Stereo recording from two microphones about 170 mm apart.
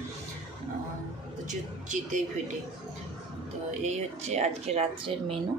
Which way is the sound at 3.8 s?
40° right (ahead or behind).